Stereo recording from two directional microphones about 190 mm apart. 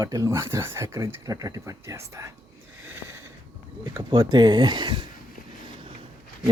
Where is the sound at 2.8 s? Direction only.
10° right (ahead or behind).